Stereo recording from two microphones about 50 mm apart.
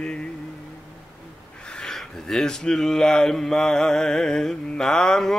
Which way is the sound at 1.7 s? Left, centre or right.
Centre.